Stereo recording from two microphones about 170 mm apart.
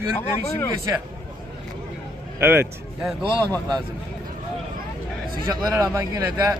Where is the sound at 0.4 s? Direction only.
15° left (ahead or behind).